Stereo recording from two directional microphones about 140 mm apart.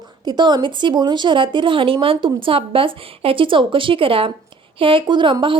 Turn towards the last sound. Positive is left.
turn(degrees=-35)  # may be behind; listen again after turning